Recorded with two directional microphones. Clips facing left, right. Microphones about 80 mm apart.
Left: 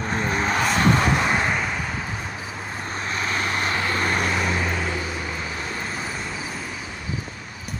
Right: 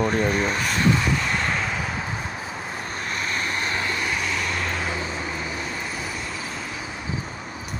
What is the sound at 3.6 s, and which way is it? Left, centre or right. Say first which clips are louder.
Vehicle: left 2 dB; left.